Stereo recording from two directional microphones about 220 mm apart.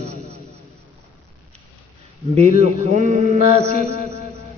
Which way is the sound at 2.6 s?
35° right (ahead or behind).